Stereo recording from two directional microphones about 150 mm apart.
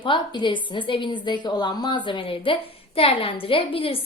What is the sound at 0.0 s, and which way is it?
A woman's voice, 35° left (ahead or behind).